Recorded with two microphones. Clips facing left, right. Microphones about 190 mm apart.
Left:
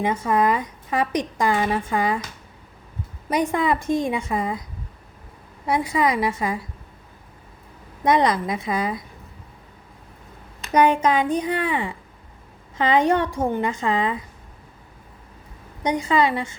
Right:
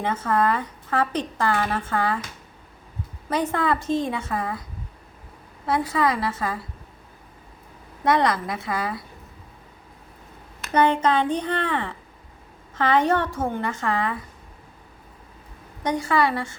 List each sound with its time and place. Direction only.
0.0 s a woman's voice: 10° left (ahead or behind)
3.2 s a woman's voice: 15° left (ahead or behind)
5.6 s a woman's voice: 15° left (ahead or behind)
8.0 s a woman's voice: 20° left (ahead or behind)
10.7 s a woman's voice: 10° left (ahead or behind)
15.8 s a woman's voice: 15° left (ahead or behind)